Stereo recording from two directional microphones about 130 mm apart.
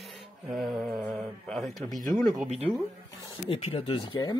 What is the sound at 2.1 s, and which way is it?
Speech, centre (ahead or behind).